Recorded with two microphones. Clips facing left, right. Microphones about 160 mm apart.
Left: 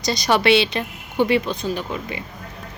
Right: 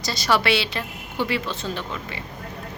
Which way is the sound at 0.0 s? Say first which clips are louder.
Left 4 dB; 20° left (ahead or behind).